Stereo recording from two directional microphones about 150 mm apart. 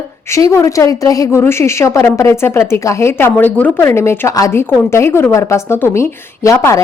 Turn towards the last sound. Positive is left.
turn(degrees=20)  # may be behind; listen again after turning